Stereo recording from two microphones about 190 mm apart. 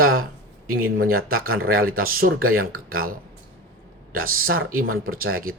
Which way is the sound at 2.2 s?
55° right (ahead or behind).